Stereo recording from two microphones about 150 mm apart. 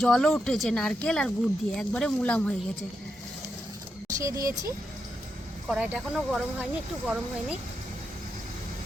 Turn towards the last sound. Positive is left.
turn(degrees=-5)  # may be behind; listen again after turning